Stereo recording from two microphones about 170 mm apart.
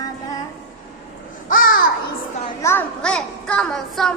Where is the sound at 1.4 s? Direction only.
55° left (ahead or behind).